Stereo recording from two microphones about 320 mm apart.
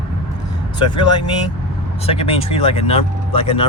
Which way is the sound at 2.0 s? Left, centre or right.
Centre.